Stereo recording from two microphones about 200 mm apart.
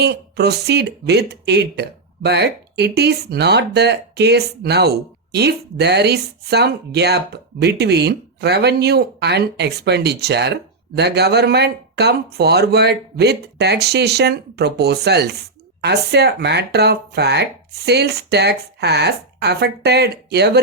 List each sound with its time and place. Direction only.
0.0 s speech: 55° right (ahead or behind)